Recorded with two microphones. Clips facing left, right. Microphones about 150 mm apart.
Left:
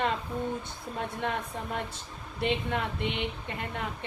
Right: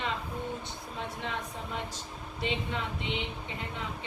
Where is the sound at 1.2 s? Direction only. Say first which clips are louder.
Left 4 dB; 55° left (ahead or behind).